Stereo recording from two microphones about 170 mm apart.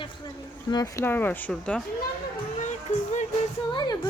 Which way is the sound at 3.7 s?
25° left (ahead or behind).